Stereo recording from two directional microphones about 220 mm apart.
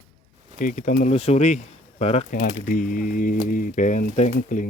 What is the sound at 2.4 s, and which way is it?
Speech, 40° left (ahead or behind).